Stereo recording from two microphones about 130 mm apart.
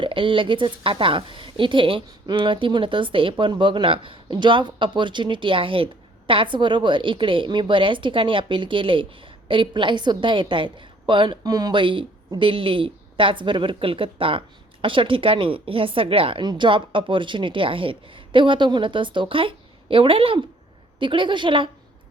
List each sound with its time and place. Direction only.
0.0 s a woman's voice: 40° right (ahead or behind)